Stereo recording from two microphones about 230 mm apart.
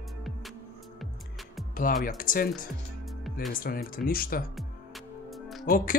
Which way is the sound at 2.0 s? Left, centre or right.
Left.